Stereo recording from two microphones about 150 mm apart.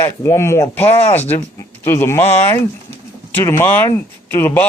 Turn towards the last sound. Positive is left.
turn(degrees=15)  # may be behind; listen again after turning